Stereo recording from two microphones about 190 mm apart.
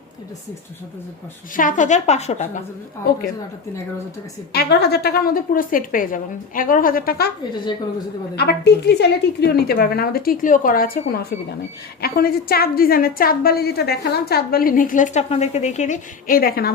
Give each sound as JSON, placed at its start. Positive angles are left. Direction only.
{"t": 1.5, "sound": "a woman's voice", "side_deg": 45}
{"t": 4.5, "sound": "a woman's voice", "side_deg": 60}
{"t": 8.4, "sound": "a woman's voice", "side_deg": 60}